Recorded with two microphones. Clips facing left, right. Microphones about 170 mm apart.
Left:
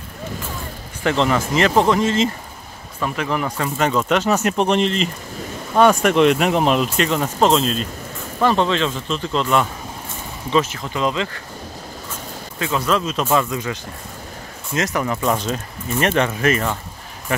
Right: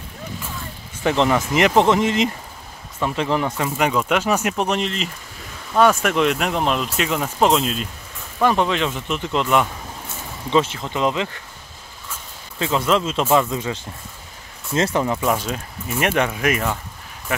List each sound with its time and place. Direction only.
1.0 s speech: 15° right (ahead or behind)
3.6 s speech: 10° right (ahead or behind)
7.1 s speech: 10° right (ahead or behind)
10.5 s speech: 25° right (ahead or behind)
12.5 s speech: 25° right (ahead or behind)
15.2 s speech: 10° right (ahead or behind)